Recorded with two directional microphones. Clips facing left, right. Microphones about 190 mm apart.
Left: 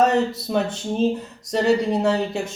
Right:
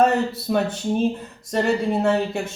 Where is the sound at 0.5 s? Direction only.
5° right (ahead or behind).